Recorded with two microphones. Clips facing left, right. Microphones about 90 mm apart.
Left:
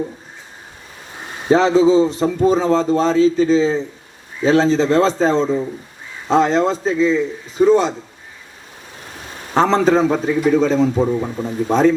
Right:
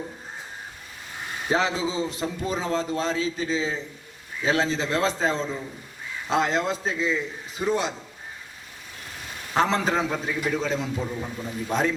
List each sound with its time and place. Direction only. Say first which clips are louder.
1.2 s a man's voice: left 10 dB; 30° left (ahead or behind)
9.6 s a man's voice: left 9 dB; 35° left (ahead or behind)